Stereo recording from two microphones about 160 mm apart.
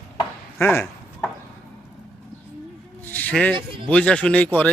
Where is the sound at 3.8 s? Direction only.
5° left (ahead or behind).